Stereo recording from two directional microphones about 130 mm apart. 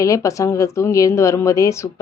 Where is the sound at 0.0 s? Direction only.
25° left (ahead or behind).